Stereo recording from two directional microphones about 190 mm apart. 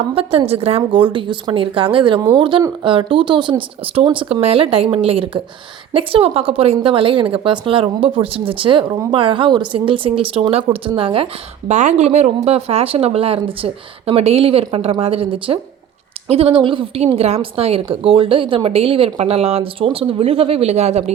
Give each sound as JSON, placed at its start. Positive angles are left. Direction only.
{"t": 0.1, "sound": "a woman's voice", "side_deg": -30}